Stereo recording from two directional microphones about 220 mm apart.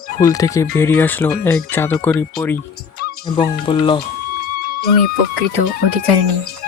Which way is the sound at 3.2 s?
20° left (ahead or behind).